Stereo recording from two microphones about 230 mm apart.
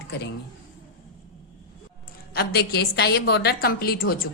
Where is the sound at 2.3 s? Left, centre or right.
Left.